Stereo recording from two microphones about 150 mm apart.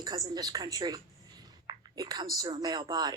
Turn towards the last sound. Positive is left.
turn(degrees=-25)  # may be behind; listen again after turning